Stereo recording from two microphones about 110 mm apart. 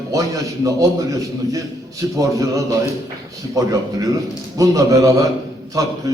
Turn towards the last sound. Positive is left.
turn(degrees=-30)  # may be behind; listen again after turning